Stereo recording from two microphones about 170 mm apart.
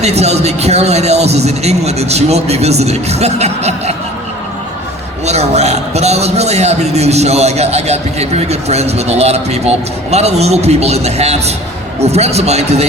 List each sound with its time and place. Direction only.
0.0 s a man's voice: 40° right (ahead or behind)
5.2 s a man's voice: 40° right (ahead or behind)